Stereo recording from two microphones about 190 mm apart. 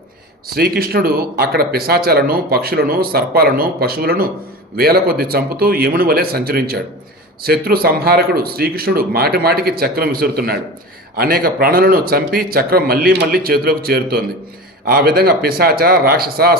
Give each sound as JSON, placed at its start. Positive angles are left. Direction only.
{"t": 0.4, "sound": "speech", "side_deg": -55}